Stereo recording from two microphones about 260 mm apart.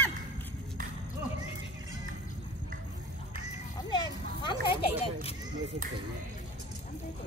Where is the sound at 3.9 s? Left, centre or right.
Centre.